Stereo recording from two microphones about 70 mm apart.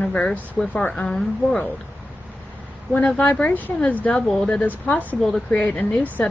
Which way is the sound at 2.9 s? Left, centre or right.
Left.